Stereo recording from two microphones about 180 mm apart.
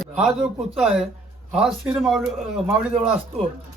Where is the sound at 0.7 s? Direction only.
5° right (ahead or behind).